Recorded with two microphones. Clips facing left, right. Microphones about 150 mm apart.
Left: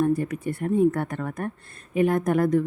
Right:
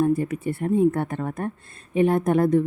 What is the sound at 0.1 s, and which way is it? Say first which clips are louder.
Speech: right 2 dB; 25° right (ahead or behind).